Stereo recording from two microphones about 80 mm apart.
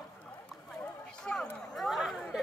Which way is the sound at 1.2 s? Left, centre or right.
Centre.